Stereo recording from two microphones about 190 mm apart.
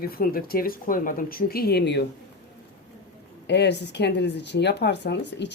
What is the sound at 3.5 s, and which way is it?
Speech, 65° left (ahead or behind).